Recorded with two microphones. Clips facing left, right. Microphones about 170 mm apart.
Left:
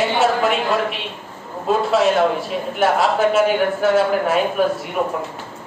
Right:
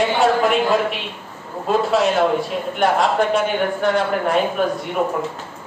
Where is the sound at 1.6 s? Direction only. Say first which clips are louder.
Left 1 dB; centre (ahead or behind).